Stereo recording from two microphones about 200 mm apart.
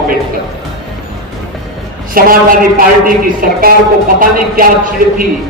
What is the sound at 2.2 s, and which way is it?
A woman's voice, 45° right (ahead or behind).